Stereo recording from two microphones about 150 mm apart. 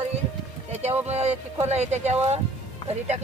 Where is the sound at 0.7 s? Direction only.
45° right (ahead or behind).